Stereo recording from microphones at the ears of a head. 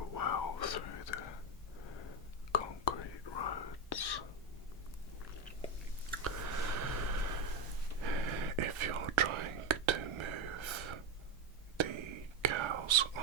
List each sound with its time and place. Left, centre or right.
0.0 s whispering: left
6.2 s snort: right
11.8 s whispering: right